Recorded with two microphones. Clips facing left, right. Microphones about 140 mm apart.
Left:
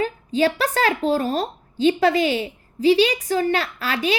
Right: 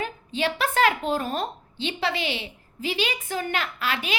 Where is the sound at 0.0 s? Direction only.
40° left (ahead or behind).